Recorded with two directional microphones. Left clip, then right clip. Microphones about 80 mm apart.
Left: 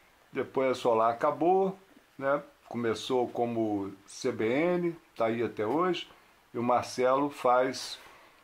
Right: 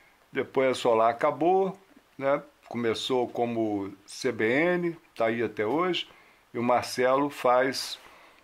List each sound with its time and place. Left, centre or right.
0.3 s speech: right